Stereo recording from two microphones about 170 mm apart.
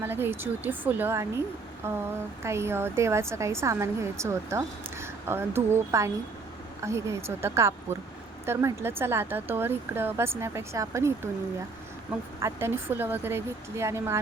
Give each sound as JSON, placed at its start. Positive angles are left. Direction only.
{"t": 0.0, "sound": "a woman's voice", "side_deg": -15}
{"t": 12.4, "sound": "a woman's voice", "side_deg": -15}